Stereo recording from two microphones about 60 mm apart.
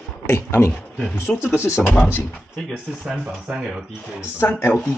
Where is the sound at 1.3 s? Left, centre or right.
Left.